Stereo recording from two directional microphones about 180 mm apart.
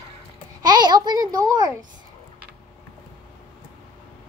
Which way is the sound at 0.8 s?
25° right (ahead or behind).